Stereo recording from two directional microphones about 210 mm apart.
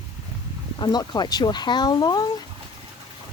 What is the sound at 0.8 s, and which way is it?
Speech, 20° left (ahead or behind).